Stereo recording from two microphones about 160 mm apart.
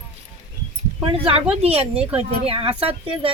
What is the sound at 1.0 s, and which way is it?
Speech, 35° right (ahead or behind).